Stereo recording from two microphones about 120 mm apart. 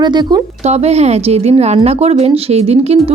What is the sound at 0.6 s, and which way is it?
A woman's voice, 65° right (ahead or behind).